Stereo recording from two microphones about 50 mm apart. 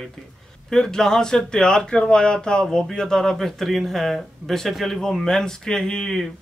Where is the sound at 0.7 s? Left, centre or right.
Centre.